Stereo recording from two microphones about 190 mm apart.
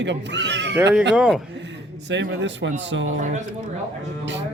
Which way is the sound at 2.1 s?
70° right (ahead or behind).